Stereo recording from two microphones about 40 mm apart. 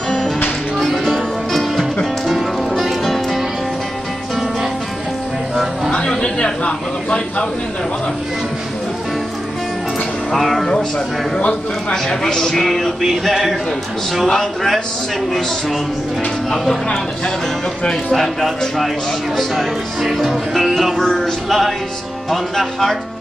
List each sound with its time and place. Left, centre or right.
0.7 s music: centre
5.9 s a sound: left
10.3 s music: centre
11.9 s speech: centre
13.3 s music: centre
14.2 s speech: centre
16.4 s speech: centre
18.1 s music: centre